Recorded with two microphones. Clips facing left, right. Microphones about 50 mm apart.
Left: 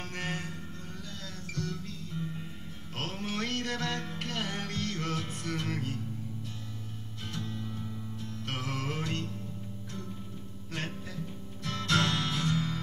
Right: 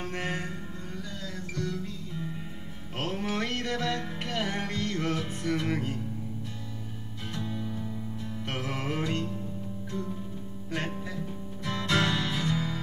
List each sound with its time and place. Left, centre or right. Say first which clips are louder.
0.0 s music: right 4 dB; centre
3.0 s music: right 4 dB; right
7.3 s music: right 4 dB; centre
10.7 s music: right 5 dB; right